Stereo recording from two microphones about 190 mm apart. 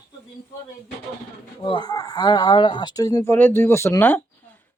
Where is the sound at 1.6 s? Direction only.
25° left (ahead or behind).